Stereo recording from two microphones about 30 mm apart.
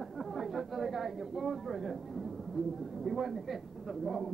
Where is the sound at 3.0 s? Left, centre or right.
Centre.